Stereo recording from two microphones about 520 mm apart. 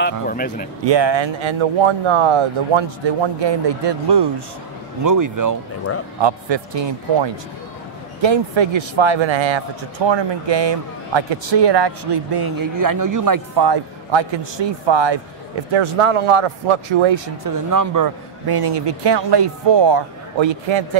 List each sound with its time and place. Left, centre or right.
0.0 s speech: centre
0.8 s speech: right
5.0 s speech: right
6.2 s speech: right
15.7 s speech: right
17.6 s a man's voice: right